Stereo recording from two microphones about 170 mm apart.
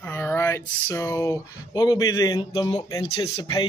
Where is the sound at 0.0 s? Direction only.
10° left (ahead or behind).